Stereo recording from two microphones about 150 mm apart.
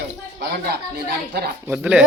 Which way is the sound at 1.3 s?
90° right.